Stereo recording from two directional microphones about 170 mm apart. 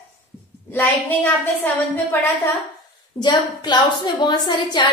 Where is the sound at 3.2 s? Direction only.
25° left (ahead or behind).